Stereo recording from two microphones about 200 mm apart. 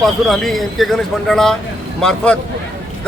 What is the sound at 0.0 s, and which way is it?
A man's voice, centre (ahead or behind).